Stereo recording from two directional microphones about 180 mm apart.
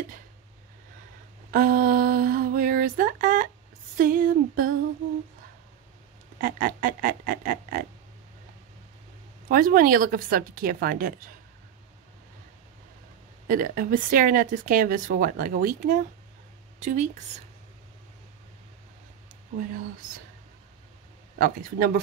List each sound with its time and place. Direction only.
1.5 s a sound: 50° right (ahead or behind)
3.9 s a woman's voice: 50° right (ahead or behind)
6.4 s a woman's voice: 50° right (ahead or behind)
9.5 s a woman's voice: 50° right (ahead or behind)
13.5 s a woman's voice: 50° right (ahead or behind)
21.4 s a woman's voice: 50° right (ahead or behind)